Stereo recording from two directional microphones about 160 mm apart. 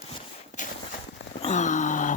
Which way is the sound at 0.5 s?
45° left (ahead or behind).